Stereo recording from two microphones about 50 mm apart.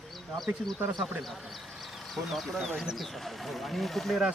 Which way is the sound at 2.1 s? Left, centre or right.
Centre.